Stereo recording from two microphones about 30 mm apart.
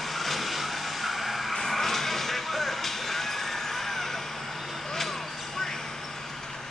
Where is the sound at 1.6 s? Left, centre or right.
Centre.